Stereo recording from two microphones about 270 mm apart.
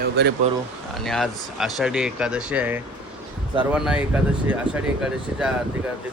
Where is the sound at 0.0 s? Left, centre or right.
Right.